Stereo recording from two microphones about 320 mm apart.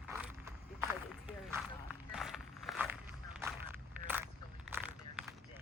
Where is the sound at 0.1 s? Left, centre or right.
Centre.